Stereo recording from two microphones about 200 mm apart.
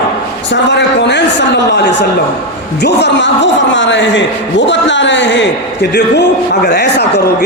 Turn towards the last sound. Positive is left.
turn(degrees=55)  # may be behind; listen again after turning